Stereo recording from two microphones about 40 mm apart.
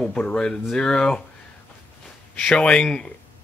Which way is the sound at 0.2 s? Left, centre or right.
Left.